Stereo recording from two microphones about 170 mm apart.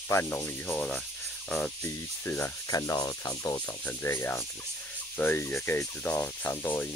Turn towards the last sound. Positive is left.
turn(degrees=10)  # may be behind; listen again after turning